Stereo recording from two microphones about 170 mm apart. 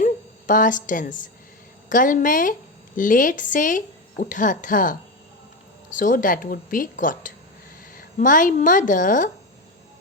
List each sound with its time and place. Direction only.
0.0 s a woman's voice: 50° left (ahead or behind)